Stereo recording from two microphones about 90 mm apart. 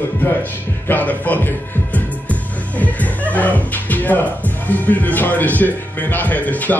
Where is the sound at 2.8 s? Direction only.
15° left (ahead or behind).